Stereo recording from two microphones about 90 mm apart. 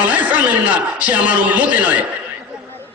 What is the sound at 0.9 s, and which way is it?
A man's voice, 15° right (ahead or behind).